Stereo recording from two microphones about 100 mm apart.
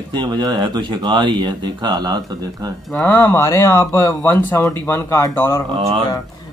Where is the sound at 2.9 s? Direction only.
25° left (ahead or behind).